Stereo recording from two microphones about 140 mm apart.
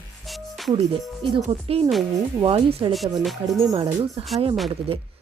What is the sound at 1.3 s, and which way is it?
Speech, 40° right (ahead or behind).